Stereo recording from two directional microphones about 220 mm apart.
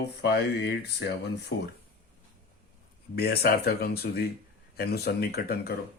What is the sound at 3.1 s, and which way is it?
Speech, 45° left (ahead or behind).